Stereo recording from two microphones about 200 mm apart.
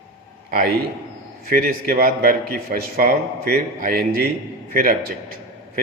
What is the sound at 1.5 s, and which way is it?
A man's voice, 50° right (ahead or behind).